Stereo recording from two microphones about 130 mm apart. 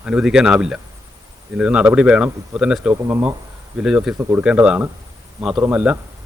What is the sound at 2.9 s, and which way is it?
Speech, 25° right (ahead or behind).